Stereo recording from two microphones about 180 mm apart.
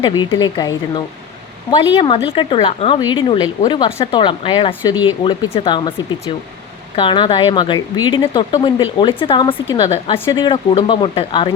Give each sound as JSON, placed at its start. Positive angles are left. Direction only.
{"t": 0.0, "sound": "speech", "side_deg": 25}
{"t": 1.7, "sound": "speech", "side_deg": 25}